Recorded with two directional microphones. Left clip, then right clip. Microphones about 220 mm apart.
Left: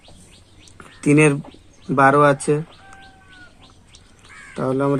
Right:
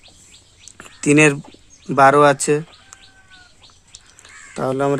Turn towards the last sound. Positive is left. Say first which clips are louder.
# right 1 dB
turn(degrees=-40)  # may be behind; listen again after turning